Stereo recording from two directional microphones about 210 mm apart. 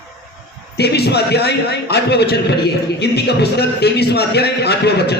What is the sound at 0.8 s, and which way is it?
A man's voice, 50° left (ahead or behind).